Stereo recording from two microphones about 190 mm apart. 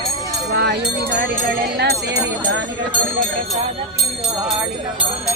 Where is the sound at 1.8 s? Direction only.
60° right (ahead or behind).